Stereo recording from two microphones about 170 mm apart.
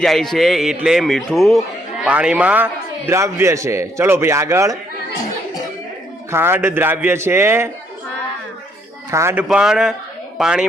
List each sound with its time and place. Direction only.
0.0 s a man's voice: centre (ahead or behind); by 4.8 s 15° right (ahead or behind)
6.3 s a man's voice: 15° right (ahead or behind)
9.0 s a man's voice: 15° right (ahead or behind)